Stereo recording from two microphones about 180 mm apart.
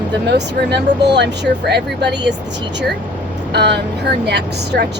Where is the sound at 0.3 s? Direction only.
70° right (ahead or behind).